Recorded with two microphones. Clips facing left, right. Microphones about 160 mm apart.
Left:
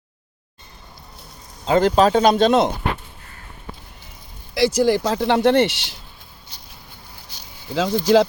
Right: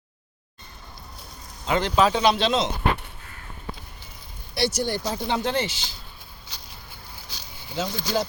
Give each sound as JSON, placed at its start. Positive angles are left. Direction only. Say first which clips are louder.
{"t": 1.6, "sound": "speech", "louder": "left 6 dB", "side_deg": 40}
{"t": 4.8, "sound": "speech", "louder": "left 9 dB", "side_deg": 90}
{"t": 6.5, "sound": "a sound", "louder": "right 1 dB", "side_deg": -90}
{"t": 7.8, "sound": "speech", "louder": "left 11 dB", "side_deg": 90}